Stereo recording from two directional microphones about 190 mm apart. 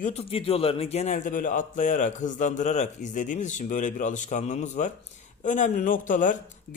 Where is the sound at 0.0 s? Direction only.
30° left (ahead or behind).